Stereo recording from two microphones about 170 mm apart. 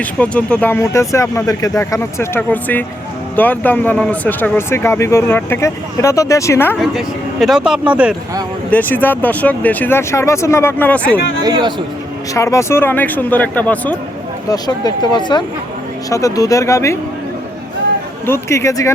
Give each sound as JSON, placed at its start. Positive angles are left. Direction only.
{"t": 0.0, "sound": "speech", "side_deg": 5}
{"t": 6.7, "sound": "speech", "side_deg": 0}
{"t": 8.7, "sound": "speech", "side_deg": 10}
{"t": 11.4, "sound": "a man's voice", "side_deg": -20}
{"t": 12.3, "sound": "speech", "side_deg": 15}
{"t": 14.5, "sound": "speech", "side_deg": 25}
{"t": 18.3, "sound": "speech", "side_deg": 15}